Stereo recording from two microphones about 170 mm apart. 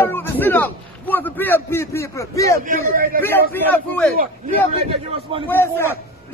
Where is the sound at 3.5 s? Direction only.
10° left (ahead or behind).